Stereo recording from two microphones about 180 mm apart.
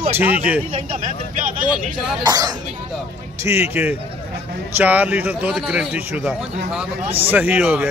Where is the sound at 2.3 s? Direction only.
20° right (ahead or behind).